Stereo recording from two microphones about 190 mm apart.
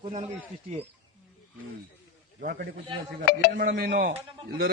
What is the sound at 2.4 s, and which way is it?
A man's voice, 55° right (ahead or behind).